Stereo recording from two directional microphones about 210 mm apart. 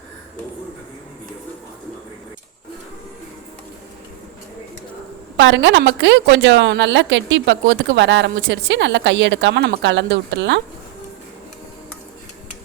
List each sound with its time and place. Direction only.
5.4 s a woman's voice: 60° right (ahead or behind)